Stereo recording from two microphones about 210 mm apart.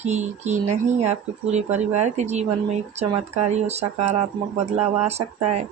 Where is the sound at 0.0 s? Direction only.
35° right (ahead or behind).